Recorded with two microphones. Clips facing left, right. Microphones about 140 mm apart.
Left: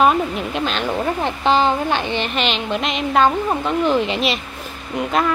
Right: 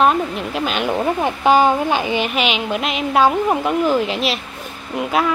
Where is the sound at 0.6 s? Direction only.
10° right (ahead or behind).